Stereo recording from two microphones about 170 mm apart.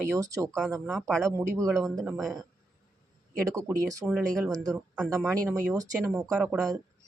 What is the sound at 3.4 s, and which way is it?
Speech, 20° right (ahead or behind).